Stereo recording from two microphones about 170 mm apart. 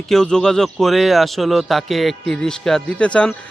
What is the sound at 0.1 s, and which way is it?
A man's voice, 5° left (ahead or behind).